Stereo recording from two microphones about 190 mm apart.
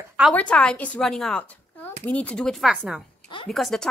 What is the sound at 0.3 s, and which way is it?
A woman's voice, 5° left (ahead or behind).